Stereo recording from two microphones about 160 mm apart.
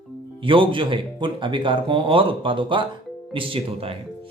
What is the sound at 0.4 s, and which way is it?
Speech, 30° right (ahead or behind).